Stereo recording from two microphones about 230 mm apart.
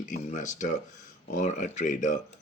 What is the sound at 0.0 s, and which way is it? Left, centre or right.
Speech, left.